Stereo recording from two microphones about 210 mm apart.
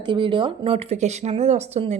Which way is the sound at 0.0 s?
20° right (ahead or behind).